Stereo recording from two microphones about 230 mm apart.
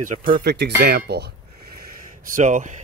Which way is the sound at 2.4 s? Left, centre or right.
Right.